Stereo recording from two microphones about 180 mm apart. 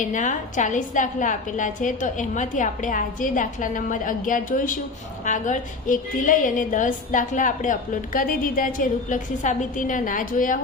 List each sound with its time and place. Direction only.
0.0 s a woman's voice: 45° left (ahead or behind)